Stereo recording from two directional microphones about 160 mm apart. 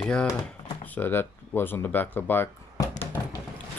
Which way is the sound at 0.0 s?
5° left (ahead or behind).